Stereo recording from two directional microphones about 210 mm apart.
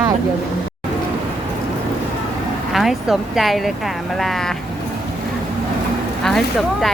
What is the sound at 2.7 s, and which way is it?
Speech, centre (ahead or behind).